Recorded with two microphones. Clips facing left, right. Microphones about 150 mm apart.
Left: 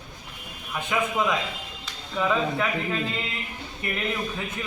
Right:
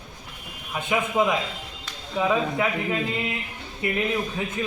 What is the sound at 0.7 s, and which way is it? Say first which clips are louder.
A man's voice: right 2 dB; 20° right (ahead or behind).